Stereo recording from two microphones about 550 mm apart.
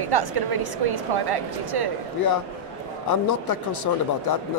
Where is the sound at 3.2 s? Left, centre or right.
Left.